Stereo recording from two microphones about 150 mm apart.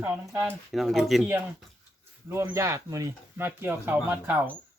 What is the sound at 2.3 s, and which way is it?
Speech, 20° right (ahead or behind).